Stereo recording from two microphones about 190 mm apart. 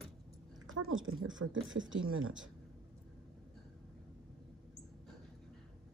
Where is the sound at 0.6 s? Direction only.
90° right.